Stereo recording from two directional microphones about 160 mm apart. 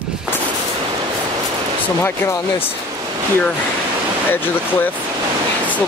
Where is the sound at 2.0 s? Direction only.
15° left (ahead or behind).